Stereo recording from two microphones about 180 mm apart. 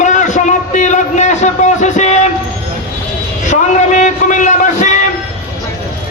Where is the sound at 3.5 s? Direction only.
45° left (ahead or behind).